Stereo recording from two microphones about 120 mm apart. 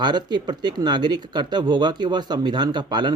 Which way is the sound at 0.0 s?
40° right (ahead or behind).